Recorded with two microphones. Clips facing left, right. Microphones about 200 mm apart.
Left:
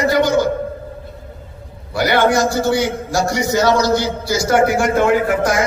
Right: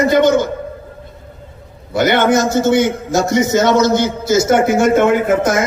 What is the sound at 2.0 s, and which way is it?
A man's voice, 20° right (ahead or behind).